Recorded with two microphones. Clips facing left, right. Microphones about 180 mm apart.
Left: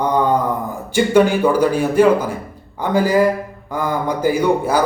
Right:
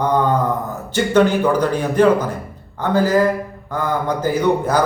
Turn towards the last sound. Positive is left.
turn(degrees=10)  # may be behind; listen again after turning